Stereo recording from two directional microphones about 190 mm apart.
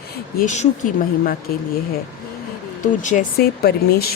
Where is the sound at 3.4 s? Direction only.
55° left (ahead or behind).